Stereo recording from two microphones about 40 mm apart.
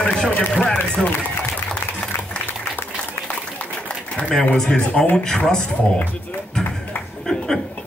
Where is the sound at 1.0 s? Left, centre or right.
Centre.